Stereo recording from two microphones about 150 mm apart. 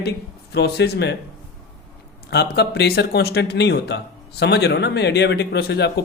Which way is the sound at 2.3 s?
90° left.